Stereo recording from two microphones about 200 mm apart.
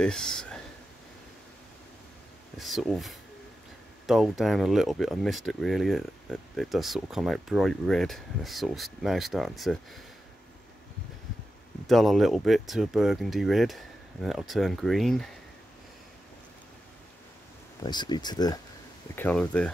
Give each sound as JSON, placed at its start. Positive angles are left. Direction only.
{"t": 0.0, "sound": "speech", "side_deg": 5}
{"t": 2.5, "sound": "speech", "side_deg": 0}
{"t": 11.9, "sound": "speech", "side_deg": 0}
{"t": 17.8, "sound": "speech", "side_deg": 20}
{"t": 19.1, "sound": "speech", "side_deg": 5}